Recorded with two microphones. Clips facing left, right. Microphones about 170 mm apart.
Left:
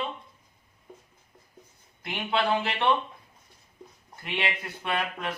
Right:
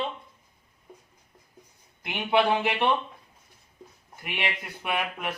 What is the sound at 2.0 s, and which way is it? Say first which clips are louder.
Speech: right 4 dB; 15° right (ahead or behind).